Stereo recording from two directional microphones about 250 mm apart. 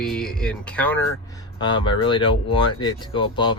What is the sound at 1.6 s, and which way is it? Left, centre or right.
Speech, centre.